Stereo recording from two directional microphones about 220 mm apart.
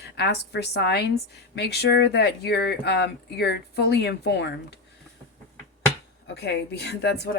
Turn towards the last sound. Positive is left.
turn(degrees=50)  # may be behind; listen again after turning